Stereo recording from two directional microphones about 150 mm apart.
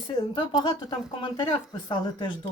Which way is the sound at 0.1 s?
30° left (ahead or behind).